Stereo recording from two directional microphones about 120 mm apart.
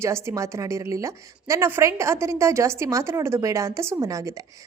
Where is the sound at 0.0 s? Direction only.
20° right (ahead or behind).